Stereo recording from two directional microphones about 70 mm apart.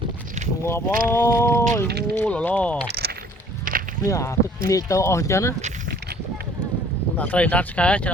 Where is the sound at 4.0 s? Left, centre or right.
Left.